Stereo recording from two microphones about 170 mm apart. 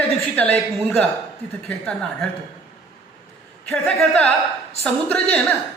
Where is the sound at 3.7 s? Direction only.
5° left (ahead or behind).